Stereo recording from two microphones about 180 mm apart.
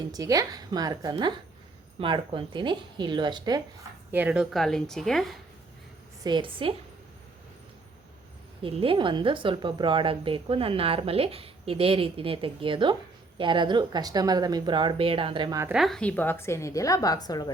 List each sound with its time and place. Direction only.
0.1 s a woman's voice: 20° right (ahead or behind)
4.1 s a woman's voice: 10° right (ahead or behind)
6.2 s a woman's voice: 25° right (ahead or behind)
8.6 s a woman's voice: 30° right (ahead or behind)
15.7 s a woman's voice: centre (ahead or behind); by 17.5 s 20° left (ahead or behind)